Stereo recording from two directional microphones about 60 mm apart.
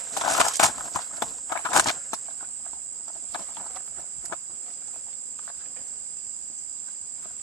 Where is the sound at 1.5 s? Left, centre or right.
Left.